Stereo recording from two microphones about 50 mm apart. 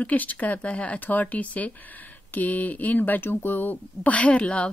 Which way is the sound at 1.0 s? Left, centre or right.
Left.